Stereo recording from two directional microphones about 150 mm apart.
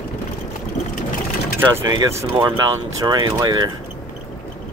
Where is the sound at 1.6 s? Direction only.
20° right (ahead or behind).